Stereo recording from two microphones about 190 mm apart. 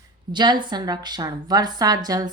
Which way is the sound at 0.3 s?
25° right (ahead or behind).